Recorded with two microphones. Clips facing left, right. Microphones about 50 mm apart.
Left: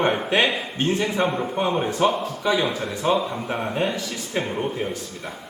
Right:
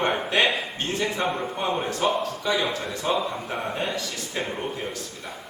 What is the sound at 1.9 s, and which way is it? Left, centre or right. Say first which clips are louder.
Speech: left 3 dB; left.